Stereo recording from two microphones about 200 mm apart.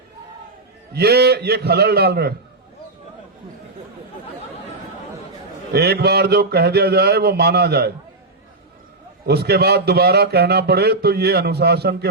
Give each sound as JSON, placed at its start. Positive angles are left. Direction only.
{"t": 0.9, "sound": "a man's voice", "side_deg": -55}
{"t": 5.7, "sound": "a man's voice", "side_deg": -55}
{"t": 9.2, "sound": "a man's voice", "side_deg": -55}